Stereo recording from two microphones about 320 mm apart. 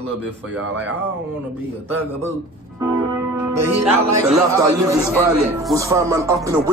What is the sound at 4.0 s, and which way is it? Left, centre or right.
Speech, right.